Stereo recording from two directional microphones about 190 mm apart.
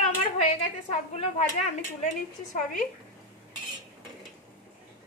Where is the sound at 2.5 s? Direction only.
45° left (ahead or behind).